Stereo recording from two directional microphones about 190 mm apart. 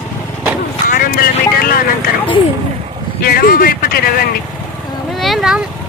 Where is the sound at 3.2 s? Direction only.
50° left (ahead or behind).